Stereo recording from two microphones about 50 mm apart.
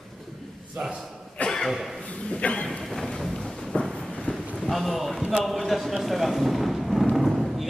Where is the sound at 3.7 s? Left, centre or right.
Left.